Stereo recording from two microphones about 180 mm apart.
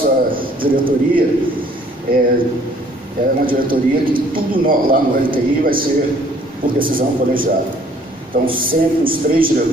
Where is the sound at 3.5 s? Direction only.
50° right (ahead or behind).